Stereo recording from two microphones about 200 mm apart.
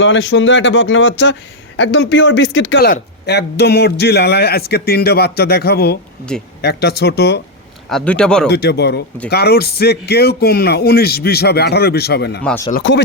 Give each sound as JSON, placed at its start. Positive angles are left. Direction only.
{"t": 0.0, "sound": "speech", "side_deg": 65}
{"t": 7.9, "sound": "speech", "side_deg": 5}
{"t": 8.4, "sound": "a man's voice", "side_deg": 55}
{"t": 12.4, "sound": "speech", "side_deg": 5}
{"t": 12.7, "sound": "speech", "side_deg": 60}